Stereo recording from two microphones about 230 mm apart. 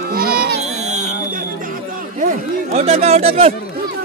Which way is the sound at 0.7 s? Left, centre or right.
Right.